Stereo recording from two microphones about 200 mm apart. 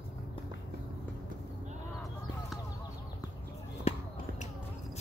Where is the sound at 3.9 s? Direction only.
30° left (ahead or behind).